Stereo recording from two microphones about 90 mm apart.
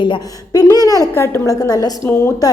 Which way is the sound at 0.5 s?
45° left (ahead or behind).